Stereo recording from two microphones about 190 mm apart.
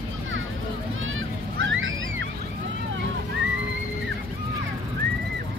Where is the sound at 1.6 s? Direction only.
90° right.